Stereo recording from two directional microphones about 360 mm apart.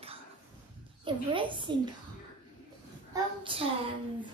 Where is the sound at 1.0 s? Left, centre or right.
Centre.